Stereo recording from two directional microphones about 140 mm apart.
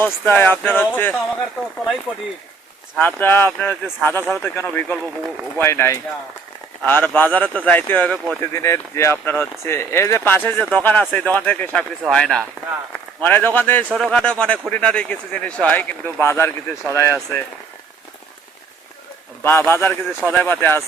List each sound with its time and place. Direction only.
0.0 s speech: 15° left (ahead or behind)
3.0 s speech: 15° left (ahead or behind)
13.9 s speech: centre (ahead or behind); by 17.2 s 20° left (ahead or behind)
19.4 s speech: 15° left (ahead or behind)